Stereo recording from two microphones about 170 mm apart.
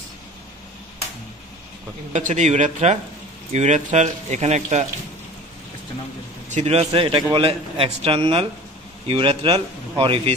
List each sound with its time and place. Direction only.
2.1 s a man's voice: 45° right (ahead or behind)
6.5 s speech: 40° right (ahead or behind)
6.9 s a man's voice: 30° right (ahead or behind)